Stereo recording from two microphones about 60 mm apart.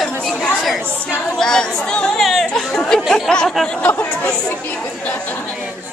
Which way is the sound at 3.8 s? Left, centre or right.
Left.